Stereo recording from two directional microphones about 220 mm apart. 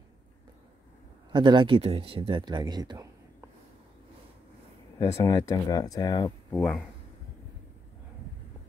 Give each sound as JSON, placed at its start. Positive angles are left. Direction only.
{"t": 1.3, "sound": "speech", "side_deg": -20}
{"t": 4.9, "sound": "speech", "side_deg": 15}